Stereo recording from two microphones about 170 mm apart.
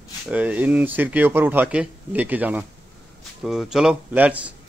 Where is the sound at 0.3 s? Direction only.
10° right (ahead or behind).